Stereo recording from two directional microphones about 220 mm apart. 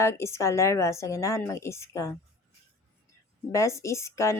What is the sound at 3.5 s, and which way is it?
Speech, 15° left (ahead or behind).